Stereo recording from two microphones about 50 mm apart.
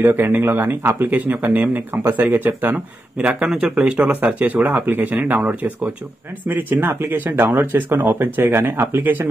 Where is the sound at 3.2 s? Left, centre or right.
Right.